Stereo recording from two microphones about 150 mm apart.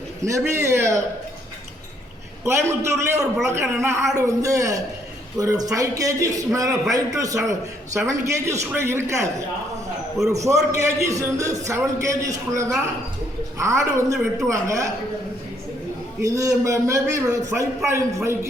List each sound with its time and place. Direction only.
0.3 s a man's voice: 20° right (ahead or behind)
2.4 s a man's voice: 20° right (ahead or behind)
10.3 s a man's voice: 20° right (ahead or behind)
16.2 s a man's voice: 25° right (ahead or behind)